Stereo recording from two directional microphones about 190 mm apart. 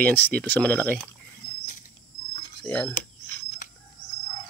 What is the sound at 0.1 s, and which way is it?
Speech, 10° left (ahead or behind).